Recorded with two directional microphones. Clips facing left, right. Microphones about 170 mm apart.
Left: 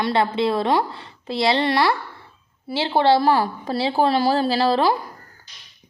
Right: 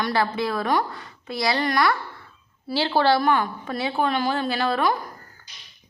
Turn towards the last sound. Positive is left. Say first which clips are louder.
# left 4 dB
turn(degrees=30)  # may be behind; listen again after turning